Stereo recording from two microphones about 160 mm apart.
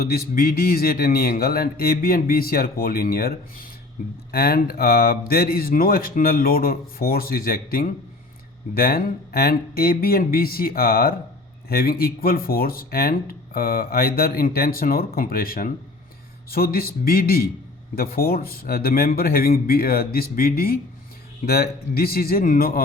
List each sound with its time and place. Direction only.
0.0 s speech: 70° left (ahead or behind)